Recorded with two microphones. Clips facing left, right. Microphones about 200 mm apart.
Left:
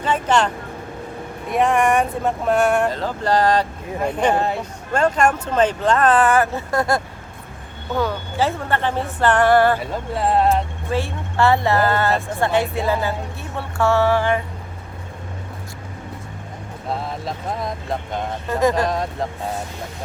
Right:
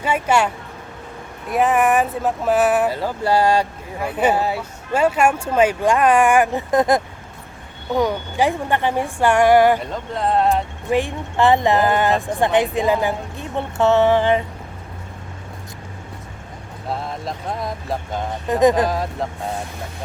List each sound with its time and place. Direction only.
0.0 s speech: 10° right (ahead or behind)
9.8 s music: 5° left (ahead or behind)
10.8 s speech: 15° right (ahead or behind)
16.9 s music: centre (ahead or behind)
18.4 s speech: 20° right (ahead or behind)
18.8 s music: centre (ahead or behind)